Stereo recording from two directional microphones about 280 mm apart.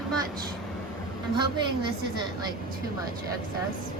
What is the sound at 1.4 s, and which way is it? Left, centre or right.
Speech, centre.